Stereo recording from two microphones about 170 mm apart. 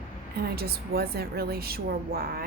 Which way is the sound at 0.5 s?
65° right (ahead or behind).